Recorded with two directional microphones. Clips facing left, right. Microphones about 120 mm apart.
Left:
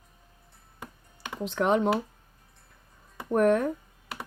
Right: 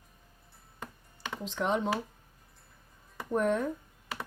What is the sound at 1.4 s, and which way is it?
Speech, 65° left (ahead or behind).